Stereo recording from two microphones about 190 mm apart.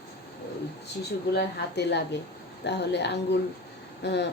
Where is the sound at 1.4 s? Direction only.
60° left (ahead or behind).